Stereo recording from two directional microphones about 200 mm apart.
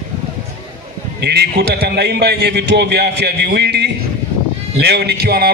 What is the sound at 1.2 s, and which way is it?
A man's voice, 55° right (ahead or behind).